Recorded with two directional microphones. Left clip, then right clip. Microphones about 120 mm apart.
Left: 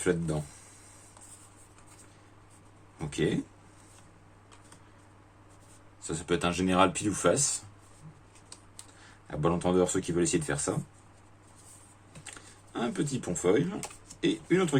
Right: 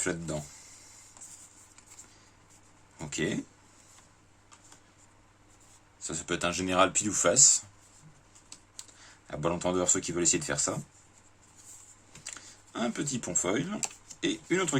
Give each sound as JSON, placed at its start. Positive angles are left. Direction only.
{"t": 0.0, "sound": "speech", "side_deg": -30}
{"t": 3.1, "sound": "speech", "side_deg": -35}
{"t": 6.1, "sound": "speech", "side_deg": -20}
{"t": 9.2, "sound": "speech", "side_deg": -25}
{"t": 12.7, "sound": "speech", "side_deg": -30}